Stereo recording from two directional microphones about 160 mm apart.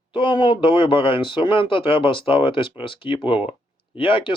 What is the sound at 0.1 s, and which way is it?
Speech, 30° left (ahead or behind).